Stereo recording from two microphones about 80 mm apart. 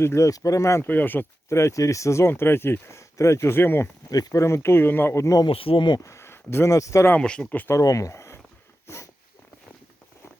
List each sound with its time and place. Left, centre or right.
0.0 s speech: left
0.9 s speech: left
4.1 s speech: left
5.7 s speech: left
6.0 s a sound: left
6.7 s speech: left
7.2 s speech: centre
7.7 s speech: left